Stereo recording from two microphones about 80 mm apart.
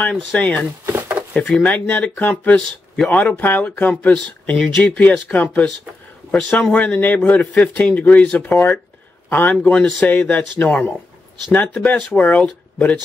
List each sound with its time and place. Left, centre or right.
0.1 s speech: centre
0.4 s speech: centre
0.7 s a sound: right
1.3 s a man's voice: centre
3.9 s a man's voice: centre
5.3 s speech: left
6.3 s a man's voice: centre
9.5 s speech: centre